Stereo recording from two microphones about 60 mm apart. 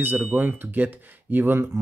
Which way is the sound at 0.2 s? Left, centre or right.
Right.